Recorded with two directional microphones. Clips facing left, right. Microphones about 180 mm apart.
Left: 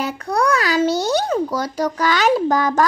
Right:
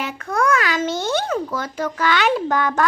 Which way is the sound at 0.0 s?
35° left (ahead or behind).